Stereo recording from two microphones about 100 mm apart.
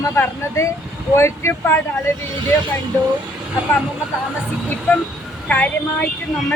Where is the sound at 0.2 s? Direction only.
30° left (ahead or behind).